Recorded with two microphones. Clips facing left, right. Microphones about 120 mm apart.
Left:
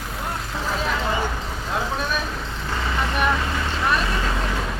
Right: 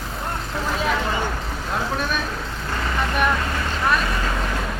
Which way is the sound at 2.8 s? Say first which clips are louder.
Right 1 dB; centre (ahead or behind).